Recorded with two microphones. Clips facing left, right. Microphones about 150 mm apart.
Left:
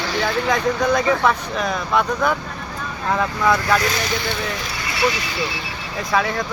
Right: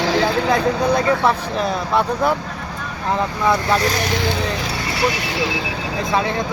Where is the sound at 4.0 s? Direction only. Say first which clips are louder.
Right 3 dB; 75° right (ahead or behind).